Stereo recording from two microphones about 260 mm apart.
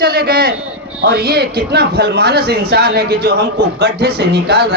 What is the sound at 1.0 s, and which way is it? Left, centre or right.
A man's voice, right.